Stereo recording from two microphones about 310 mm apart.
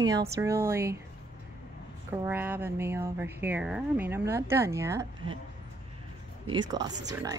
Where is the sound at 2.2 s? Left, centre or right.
Centre.